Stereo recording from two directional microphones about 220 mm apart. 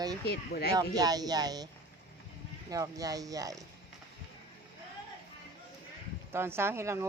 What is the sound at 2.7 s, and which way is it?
Speech, 15° right (ahead or behind).